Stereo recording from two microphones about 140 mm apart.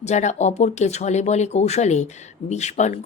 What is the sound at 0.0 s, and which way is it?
A woman's voice, 55° left (ahead or behind).